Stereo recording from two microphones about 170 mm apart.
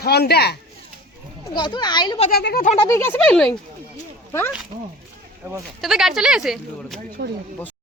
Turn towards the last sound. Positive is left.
turn(degrees=-90)